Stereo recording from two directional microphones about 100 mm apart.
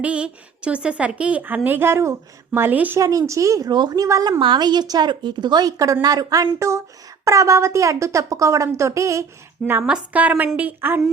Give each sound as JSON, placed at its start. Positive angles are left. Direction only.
{"t": 0.0, "sound": "a woman's voice", "side_deg": -10}
{"t": 3.0, "sound": "speech", "side_deg": -35}
{"t": 4.4, "sound": "a woman's voice", "side_deg": -50}
{"t": 9.8, "sound": "a woman's voice", "side_deg": -10}